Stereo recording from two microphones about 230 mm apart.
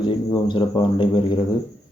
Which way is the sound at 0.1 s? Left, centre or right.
Left.